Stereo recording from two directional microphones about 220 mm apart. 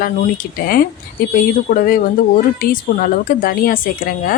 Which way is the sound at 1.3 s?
40° left (ahead or behind).